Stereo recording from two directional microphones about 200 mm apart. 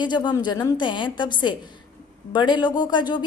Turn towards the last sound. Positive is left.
turn(degrees=20)  # may be behind; listen again after turning